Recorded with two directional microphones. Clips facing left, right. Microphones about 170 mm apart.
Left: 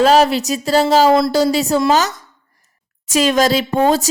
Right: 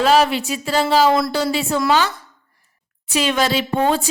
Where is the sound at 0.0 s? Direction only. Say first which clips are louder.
Left 3 dB; 40° left (ahead or behind).